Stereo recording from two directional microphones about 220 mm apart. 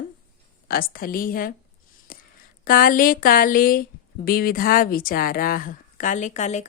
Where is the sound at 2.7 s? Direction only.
40° left (ahead or behind).